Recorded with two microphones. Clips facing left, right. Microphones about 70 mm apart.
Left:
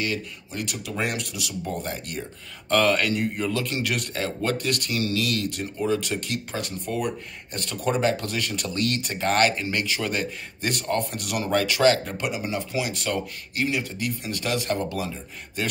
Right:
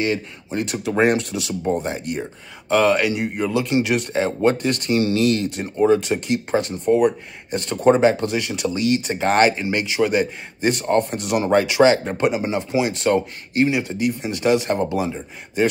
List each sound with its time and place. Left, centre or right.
0.0 s speech: right
1.6 s speech: right
2.7 s speech: centre
9.0 s speech: right
12.1 s speech: right